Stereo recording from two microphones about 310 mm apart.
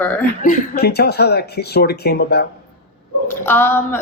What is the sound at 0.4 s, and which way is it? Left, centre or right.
Speech, left.